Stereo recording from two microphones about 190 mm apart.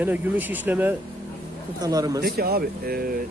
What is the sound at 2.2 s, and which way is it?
Speech, 55° right (ahead or behind).